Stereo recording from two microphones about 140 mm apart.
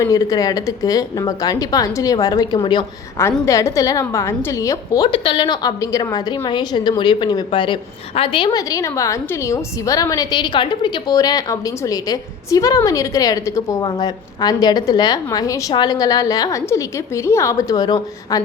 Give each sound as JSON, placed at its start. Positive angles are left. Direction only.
{"t": 0.0, "sound": "a woman's voice", "side_deg": 25}
{"t": 5.0, "sound": "a woman's voice", "side_deg": 35}